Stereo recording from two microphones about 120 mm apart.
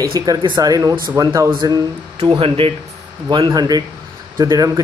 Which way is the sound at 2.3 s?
50° right (ahead or behind).